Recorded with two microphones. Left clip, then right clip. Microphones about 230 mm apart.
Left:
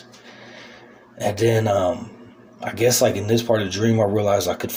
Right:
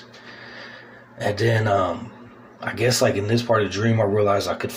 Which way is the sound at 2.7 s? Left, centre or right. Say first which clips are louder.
Left 2 dB; left.